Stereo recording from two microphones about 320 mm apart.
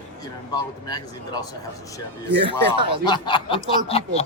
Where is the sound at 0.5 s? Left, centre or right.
Centre.